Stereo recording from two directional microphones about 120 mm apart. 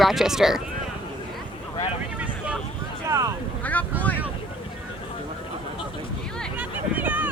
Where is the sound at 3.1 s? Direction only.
30° right (ahead or behind).